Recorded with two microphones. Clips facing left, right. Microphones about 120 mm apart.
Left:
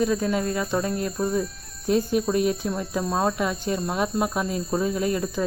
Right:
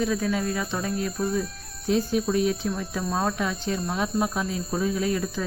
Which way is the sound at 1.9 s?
50° left (ahead or behind).